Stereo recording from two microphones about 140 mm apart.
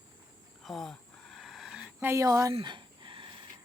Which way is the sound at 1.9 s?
20° right (ahead or behind).